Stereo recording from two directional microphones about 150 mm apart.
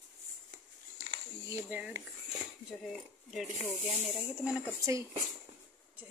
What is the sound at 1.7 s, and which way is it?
Speech, 10° right (ahead or behind).